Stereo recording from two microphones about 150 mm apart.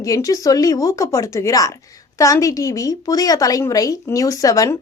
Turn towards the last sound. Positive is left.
turn(degrees=25)  # may be behind; listen again after turning